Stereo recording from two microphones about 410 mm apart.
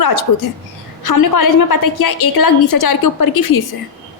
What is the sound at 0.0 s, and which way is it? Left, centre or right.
Speech, left.